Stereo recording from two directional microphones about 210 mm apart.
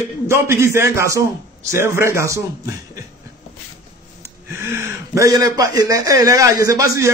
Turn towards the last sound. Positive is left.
turn(degrees=-15)  # may be behind; listen again after turning